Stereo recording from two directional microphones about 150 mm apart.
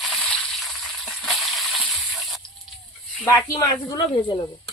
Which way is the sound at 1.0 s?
Centre (ahead or behind).